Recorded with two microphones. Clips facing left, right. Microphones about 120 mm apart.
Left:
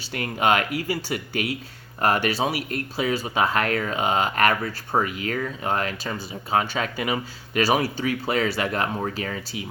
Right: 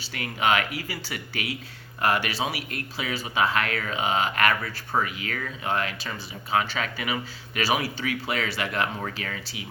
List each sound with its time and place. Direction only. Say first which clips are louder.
0.1 s speech: left 3 dB; 40° left (ahead or behind)